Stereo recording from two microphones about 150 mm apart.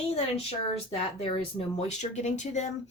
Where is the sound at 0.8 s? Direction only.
40° left (ahead or behind).